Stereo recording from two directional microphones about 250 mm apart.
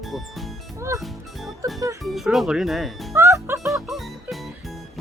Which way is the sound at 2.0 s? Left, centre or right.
Centre.